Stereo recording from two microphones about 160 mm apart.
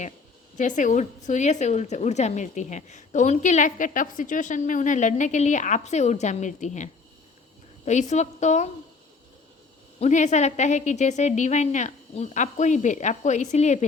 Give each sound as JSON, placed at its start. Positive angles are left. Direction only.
{"t": 0.5, "sound": "a woman's voice", "side_deg": 50}
{"t": 10.0, "sound": "a woman's voice", "side_deg": 45}